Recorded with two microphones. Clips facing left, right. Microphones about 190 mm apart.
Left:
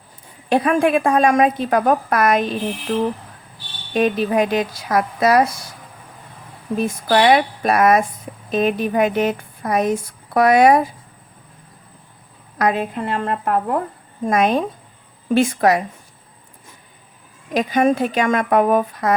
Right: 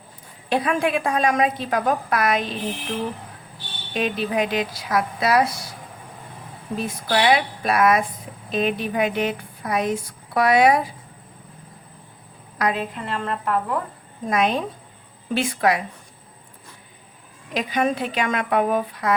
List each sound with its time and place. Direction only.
0.5 s a woman's voice: 50° left (ahead or behind)
3.9 s a woman's voice: 50° left (ahead or behind)
6.7 s a woman's voice: 50° left (ahead or behind)
12.5 s a woman's voice: 50° left (ahead or behind)
17.5 s a woman's voice: 45° left (ahead or behind)